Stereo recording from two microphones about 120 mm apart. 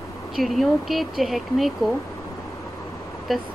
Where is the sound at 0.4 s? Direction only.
Centre (ahead or behind).